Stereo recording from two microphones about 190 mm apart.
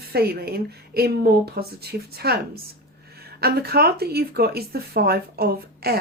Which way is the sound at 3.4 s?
55° right (ahead or behind).